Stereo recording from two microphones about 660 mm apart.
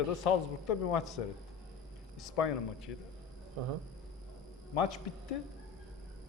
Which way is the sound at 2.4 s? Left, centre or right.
Left.